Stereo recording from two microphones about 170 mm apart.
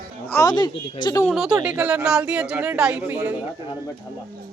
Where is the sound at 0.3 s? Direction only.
20° left (ahead or behind).